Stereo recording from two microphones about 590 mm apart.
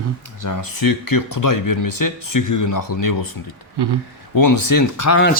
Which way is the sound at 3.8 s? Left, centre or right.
Right.